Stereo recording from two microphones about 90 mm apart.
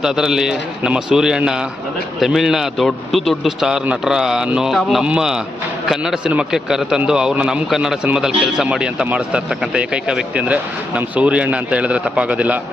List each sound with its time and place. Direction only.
0.0 s a man's voice: 5° right (ahead or behind)